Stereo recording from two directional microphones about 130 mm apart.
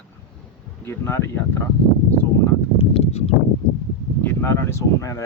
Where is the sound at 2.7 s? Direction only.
50° left (ahead or behind).